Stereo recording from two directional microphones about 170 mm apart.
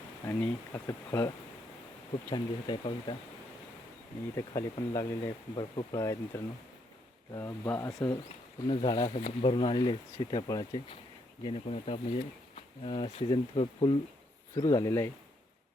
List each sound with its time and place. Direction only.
0.3 s speech: 15° left (ahead or behind)
2.3 s speech: 25° left (ahead or behind)
4.4 s speech: 20° left (ahead or behind)
11.4 s speech: 35° left (ahead or behind); by 15.1 s 15° left (ahead or behind)